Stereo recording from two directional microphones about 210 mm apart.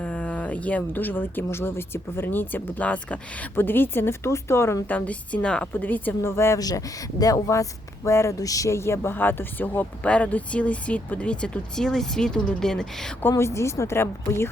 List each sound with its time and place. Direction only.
0.0 s speech: 5° left (ahead or behind)
13.3 s speech: 15° left (ahead or behind)